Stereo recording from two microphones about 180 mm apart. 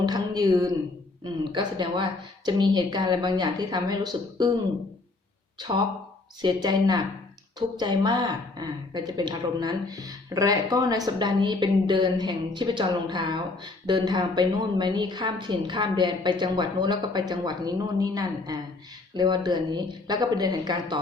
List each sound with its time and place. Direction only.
0.0 s a sound: 20° right (ahead or behind)
1.2 s a woman's voice: 25° right (ahead or behind)
6.4 s a woman's voice: 25° right (ahead or behind)